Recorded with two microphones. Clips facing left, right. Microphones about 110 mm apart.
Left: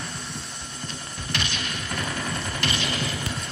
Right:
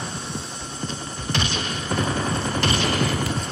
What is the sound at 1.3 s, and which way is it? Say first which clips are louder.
Machine gun: right 5 dB; 30° right (ahead or behind).